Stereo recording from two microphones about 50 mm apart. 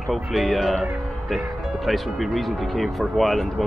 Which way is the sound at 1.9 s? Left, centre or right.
Centre.